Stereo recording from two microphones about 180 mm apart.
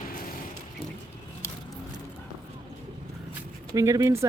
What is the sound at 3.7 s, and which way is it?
Speech, 20° right (ahead or behind).